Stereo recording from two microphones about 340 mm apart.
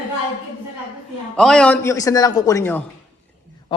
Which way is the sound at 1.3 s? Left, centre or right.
Centre.